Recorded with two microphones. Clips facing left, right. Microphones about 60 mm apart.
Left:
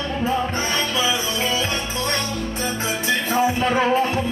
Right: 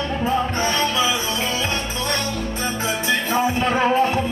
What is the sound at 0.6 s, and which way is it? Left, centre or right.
Music, right.